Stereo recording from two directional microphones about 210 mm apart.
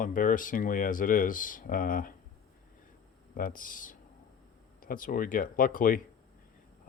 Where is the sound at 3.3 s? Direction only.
40° left (ahead or behind).